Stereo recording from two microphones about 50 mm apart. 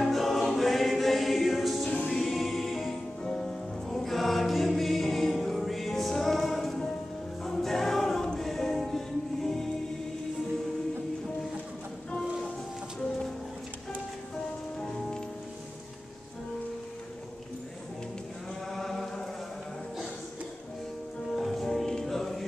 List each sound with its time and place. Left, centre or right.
0.0 s choir: centre
1.9 s music: centre
2.1 s music: centre
18.7 s chant: centre
21.3 s music: centre